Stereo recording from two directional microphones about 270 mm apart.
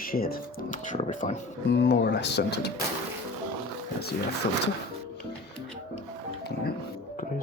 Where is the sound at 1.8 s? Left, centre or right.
Left.